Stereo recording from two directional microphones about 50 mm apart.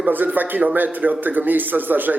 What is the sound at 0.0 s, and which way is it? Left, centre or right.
A man's voice, right.